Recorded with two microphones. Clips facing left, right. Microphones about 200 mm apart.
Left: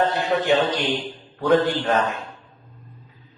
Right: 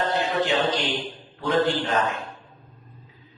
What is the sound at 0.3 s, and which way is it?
Speech, 55° left (ahead or behind).